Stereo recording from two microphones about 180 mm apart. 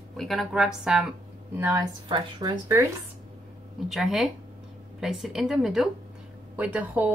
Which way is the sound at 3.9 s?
Centre (ahead or behind).